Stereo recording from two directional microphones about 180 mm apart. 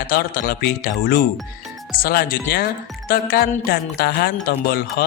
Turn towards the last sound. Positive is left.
turn(degrees=60)  # may be behind; listen again after turning